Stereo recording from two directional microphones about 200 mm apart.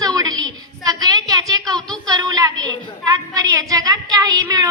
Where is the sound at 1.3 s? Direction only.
20° right (ahead or behind).